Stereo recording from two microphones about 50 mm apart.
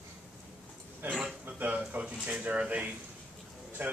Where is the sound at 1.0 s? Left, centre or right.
Right.